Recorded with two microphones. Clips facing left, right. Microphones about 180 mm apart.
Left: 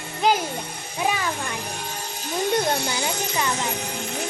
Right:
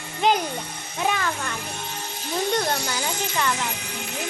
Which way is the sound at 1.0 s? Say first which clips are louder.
Even; 10° left (ahead or behind).